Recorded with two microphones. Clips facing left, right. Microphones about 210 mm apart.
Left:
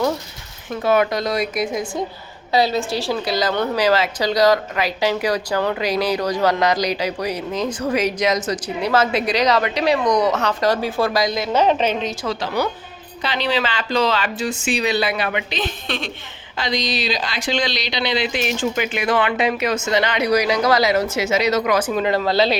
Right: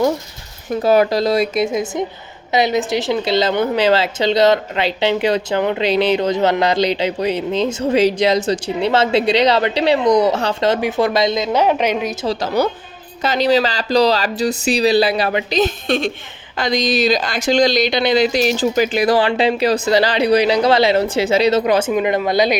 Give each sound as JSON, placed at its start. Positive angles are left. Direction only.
{"t": 0.7, "sound": "a woman's voice", "side_deg": -35}
{"t": 12.2, "sound": "speech", "side_deg": -40}
{"t": 21.9, "sound": "speech", "side_deg": -15}